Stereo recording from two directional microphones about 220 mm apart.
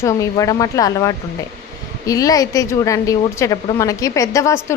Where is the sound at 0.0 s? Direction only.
15° left (ahead or behind).